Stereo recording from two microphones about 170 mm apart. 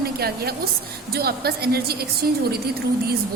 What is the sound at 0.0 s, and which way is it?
A woman's voice, 65° right (ahead or behind).